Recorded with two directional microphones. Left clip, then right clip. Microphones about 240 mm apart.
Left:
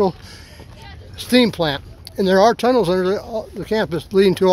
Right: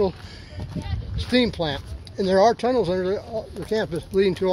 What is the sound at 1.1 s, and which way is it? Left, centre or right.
Speech, left.